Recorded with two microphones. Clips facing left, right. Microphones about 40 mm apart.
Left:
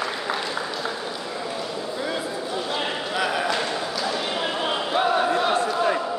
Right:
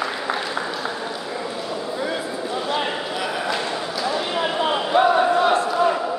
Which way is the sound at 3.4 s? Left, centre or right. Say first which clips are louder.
Even; centre.